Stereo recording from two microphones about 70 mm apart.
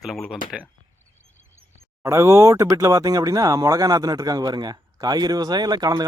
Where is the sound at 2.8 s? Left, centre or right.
Right.